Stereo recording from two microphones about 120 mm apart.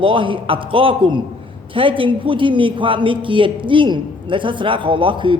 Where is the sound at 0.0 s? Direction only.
45° right (ahead or behind).